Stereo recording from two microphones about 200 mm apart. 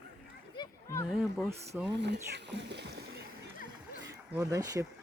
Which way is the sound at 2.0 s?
60° right (ahead or behind).